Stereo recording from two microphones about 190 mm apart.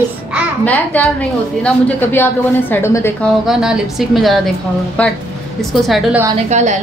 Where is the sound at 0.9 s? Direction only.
10° left (ahead or behind).